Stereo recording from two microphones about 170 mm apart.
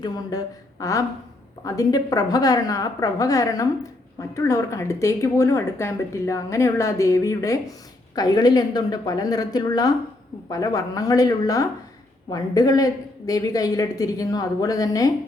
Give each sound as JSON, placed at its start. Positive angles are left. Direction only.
{"t": 0.0, "sound": "a woman's voice", "side_deg": 20}